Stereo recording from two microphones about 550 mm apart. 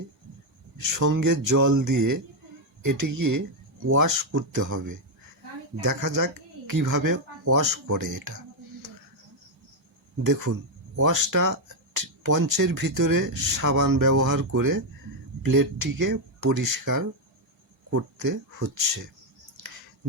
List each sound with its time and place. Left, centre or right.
0.8 s speech: right
10.2 s speech: right